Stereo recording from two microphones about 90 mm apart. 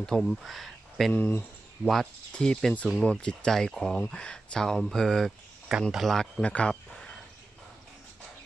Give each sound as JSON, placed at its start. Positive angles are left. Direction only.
{"t": 0.0, "sound": "speech", "side_deg": 5}
{"t": 1.1, "sound": "speech", "side_deg": 20}
{"t": 2.3, "sound": "speech", "side_deg": 10}
{"t": 6.4, "sound": "a sound", "side_deg": 15}